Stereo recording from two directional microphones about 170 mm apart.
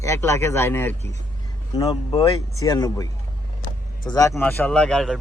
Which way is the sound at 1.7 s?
30° left (ahead or behind).